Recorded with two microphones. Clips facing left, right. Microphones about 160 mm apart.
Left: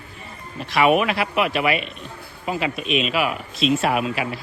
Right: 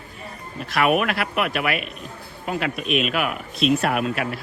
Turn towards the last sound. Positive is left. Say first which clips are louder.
# left 1 dB
turn(degrees=0)  # may be behind; listen again after turning